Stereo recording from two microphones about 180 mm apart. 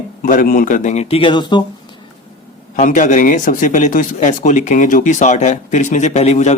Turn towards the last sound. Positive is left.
turn(degrees=40)  # may be behind; listen again after turning